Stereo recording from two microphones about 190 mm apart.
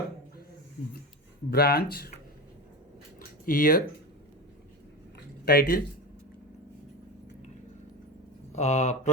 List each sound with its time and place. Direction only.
1.5 s speech: 55° left (ahead or behind)
3.2 s a sound: 45° left (ahead or behind)
5.5 s speech: 50° left (ahead or behind)
8.5 s speech: 35° left (ahead or behind)